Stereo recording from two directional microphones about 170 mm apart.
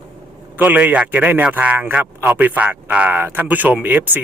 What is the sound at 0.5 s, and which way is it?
A man's voice, 10° right (ahead or behind).